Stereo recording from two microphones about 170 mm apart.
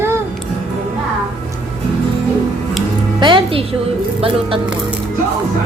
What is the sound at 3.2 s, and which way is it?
Music, 30° right (ahead or behind).